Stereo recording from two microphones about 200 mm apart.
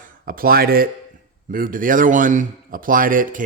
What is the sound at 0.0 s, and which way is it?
A man's voice, 45° right (ahead or behind).